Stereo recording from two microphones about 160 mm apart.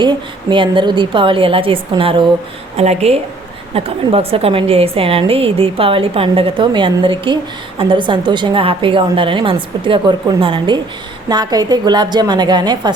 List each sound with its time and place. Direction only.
0.5 s a woman's voice: 30° right (ahead or behind)